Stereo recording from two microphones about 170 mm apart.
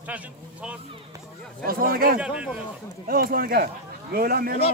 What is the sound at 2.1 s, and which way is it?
Speech, 5° right (ahead or behind).